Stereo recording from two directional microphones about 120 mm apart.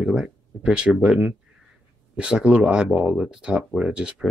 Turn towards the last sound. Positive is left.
turn(degrees=-10)  # may be behind; listen again after turning